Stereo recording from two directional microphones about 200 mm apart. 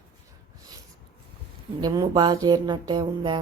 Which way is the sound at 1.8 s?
20° right (ahead or behind).